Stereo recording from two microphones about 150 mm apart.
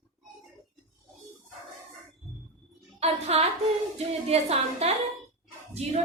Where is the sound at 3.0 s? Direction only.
45° right (ahead or behind).